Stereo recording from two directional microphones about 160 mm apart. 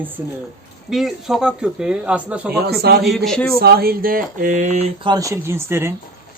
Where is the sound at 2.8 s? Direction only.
80° right.